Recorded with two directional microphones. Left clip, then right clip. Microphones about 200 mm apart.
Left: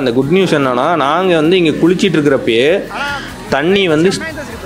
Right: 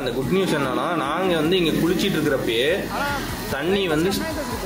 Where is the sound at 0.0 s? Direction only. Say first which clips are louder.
Left 10 dB; 35° left (ahead or behind).